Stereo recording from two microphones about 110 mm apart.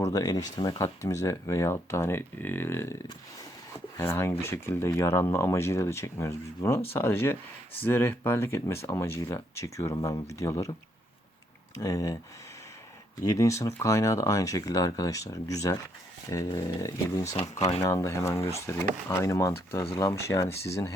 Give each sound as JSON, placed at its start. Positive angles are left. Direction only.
{"t": 0.0, "sound": "speech", "side_deg": 35}
{"t": 11.8, "sound": "speech", "side_deg": 30}
{"t": 13.2, "sound": "speech", "side_deg": 30}